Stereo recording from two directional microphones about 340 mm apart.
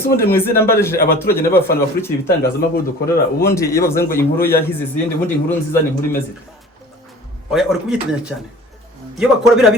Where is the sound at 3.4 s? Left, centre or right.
Centre.